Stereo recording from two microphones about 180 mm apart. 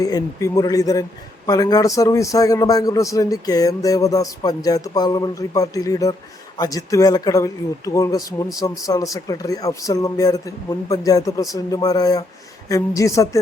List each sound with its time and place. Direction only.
0.0 s a man's voice: 20° left (ahead or behind)